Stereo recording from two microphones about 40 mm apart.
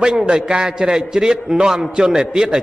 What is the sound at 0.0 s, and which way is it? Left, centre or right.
A man's voice, centre.